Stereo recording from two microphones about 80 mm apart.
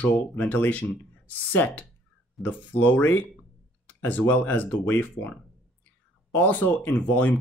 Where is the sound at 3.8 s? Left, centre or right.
Left.